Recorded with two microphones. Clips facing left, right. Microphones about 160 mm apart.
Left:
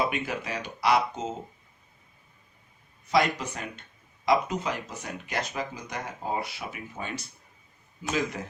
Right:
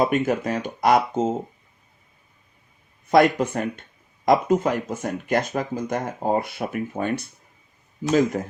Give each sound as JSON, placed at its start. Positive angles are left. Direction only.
{"t": 0.0, "sound": "speech", "side_deg": -45}
{"t": 3.1, "sound": "speech", "side_deg": -50}